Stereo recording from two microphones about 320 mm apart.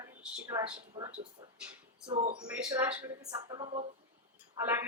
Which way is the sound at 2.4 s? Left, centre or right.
Centre.